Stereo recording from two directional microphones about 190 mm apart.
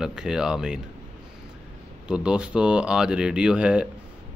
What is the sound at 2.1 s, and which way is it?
Speech, 5° right (ahead or behind).